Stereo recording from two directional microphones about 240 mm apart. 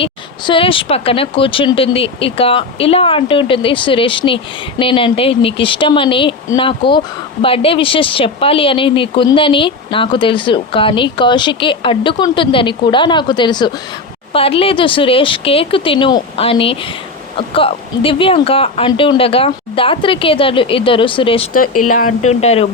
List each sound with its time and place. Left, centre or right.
0.0 s speech: left
21.8 s speech: left